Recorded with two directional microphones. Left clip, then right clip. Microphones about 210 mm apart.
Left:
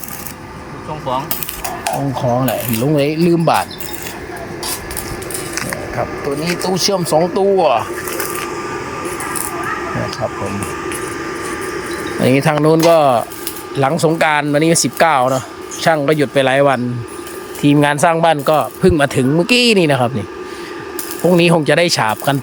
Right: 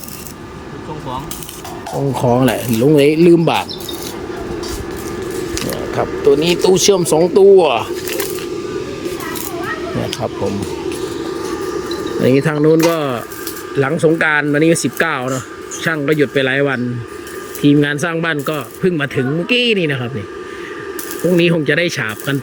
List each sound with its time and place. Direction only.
2.1 s speech: 10° right (ahead or behind)
6.0 s speech: 5° right (ahead or behind)
11.9 s speech: 10° left (ahead or behind)